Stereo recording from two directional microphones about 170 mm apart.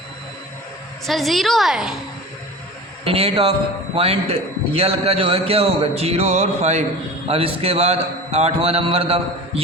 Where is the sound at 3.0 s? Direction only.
35° right (ahead or behind).